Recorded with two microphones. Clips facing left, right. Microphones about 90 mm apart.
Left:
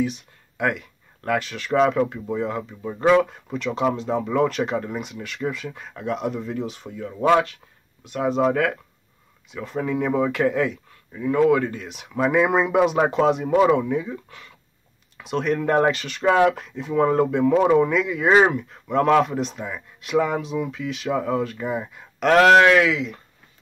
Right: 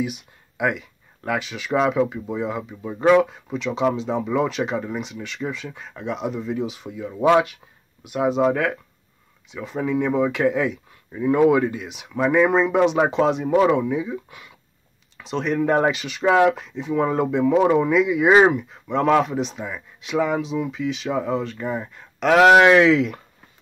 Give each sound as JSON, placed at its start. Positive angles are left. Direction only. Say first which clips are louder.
{"t": 0.0, "sound": "speech", "louder": "left 2 dB", "side_deg": -5}
{"t": 11.1, "sound": "speech", "louder": "right 1 dB", "side_deg": -25}
{"t": 11.7, "sound": "speech", "louder": "right 1 dB", "side_deg": -5}
{"t": 15.1, "sound": "speech", "louder": "even", "side_deg": 0}
{"t": 22.7, "sound": "speech", "louder": "right 3 dB", "side_deg": -30}